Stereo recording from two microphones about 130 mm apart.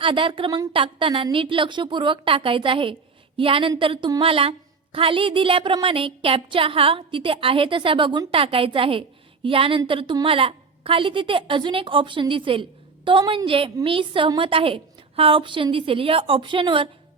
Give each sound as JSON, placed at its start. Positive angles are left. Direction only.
{"t": 0.0, "sound": "a woman's voice", "side_deg": -40}